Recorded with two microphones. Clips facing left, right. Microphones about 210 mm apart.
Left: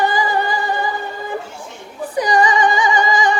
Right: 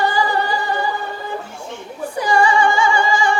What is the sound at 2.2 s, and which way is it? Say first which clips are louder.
Female singing: left 1 dB; 15° left (ahead or behind).